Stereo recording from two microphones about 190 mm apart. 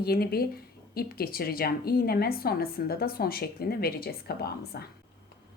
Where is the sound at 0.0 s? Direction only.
55° left (ahead or behind).